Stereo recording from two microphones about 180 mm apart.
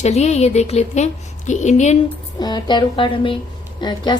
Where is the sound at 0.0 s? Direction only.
40° left (ahead or behind).